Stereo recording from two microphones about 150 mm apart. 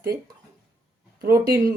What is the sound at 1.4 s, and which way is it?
Speech, 90° right.